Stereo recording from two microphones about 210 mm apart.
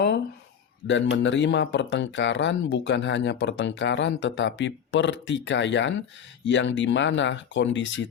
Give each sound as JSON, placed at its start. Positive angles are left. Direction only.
{"t": 0.9, "sound": "speech", "side_deg": 60}